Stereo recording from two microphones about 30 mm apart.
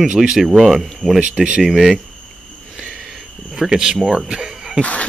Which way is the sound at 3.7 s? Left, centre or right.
Right.